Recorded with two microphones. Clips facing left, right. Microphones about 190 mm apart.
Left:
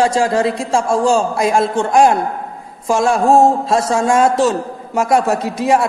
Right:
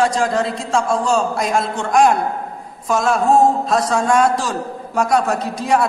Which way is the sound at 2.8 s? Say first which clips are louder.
Left 3 dB; 30° left (ahead or behind).